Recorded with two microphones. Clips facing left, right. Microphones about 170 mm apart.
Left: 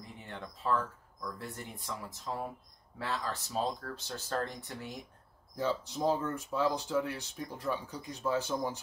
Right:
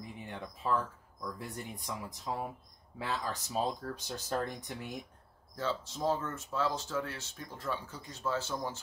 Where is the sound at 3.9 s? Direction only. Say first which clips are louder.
Right 1 dB; 15° right (ahead or behind).